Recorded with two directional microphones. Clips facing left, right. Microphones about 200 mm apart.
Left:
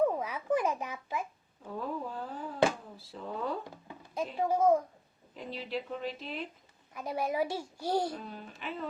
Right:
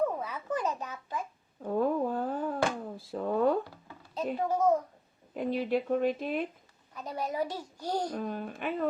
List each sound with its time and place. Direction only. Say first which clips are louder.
0.2 s a sound: left 3 dB; 10° left (ahead or behind)
1.6 s a sound: right 9 dB; 50° right (ahead or behind)
3.0 s speech: right 11 dB; 55° right (ahead or behind)
3.6 s music: right 3 dB; 15° left (ahead or behind)
4.4 s a child's voice: left 1 dB; 10° left (ahead or behind)
5.3 s speech: right 9 dB; 55° right (ahead or behind)
6.9 s a child's voice: left 2 dB; 10° left (ahead or behind)
8.1 s speech: right 8 dB; 50° right (ahead or behind)